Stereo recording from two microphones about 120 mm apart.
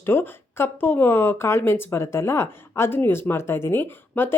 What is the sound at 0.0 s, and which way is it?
A woman's voice, 20° left (ahead or behind).